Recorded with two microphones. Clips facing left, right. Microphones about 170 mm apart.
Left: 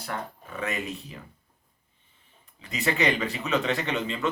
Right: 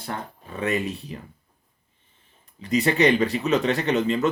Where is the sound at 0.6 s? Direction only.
35° right (ahead or behind).